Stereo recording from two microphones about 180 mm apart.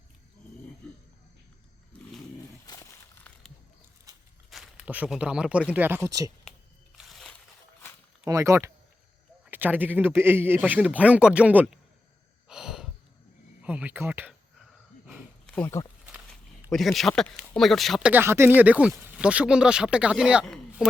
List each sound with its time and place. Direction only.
3.3 s a sound: 10° left (ahead or behind)
4.1 s walk: 20° right (ahead or behind)
4.4 s speech: centre (ahead or behind); by 6.3 s 20° right (ahead or behind)
6.9 s a sound: centre (ahead or behind)
8.3 s speech: 15° right (ahead or behind)
12.5 s breathing: 5° right (ahead or behind)
13.6 s a sound: 10° right (ahead or behind)
15.5 s speech: 15° left (ahead or behind)
16.7 s speech: centre (ahead or behind)